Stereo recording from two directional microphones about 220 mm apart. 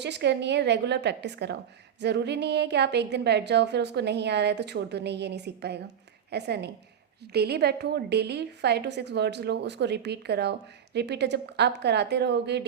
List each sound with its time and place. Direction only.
0.0 s a woman's voice: 50° right (ahead or behind)